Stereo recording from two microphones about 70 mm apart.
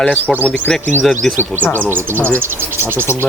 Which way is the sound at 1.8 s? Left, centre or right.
Right.